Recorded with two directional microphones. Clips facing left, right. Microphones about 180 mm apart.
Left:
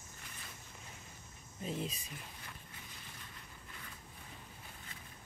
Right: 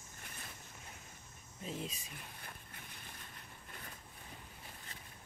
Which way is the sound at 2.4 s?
55° right (ahead or behind).